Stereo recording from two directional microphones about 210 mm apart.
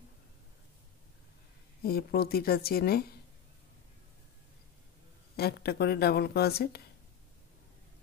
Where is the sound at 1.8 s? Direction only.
45° left (ahead or behind).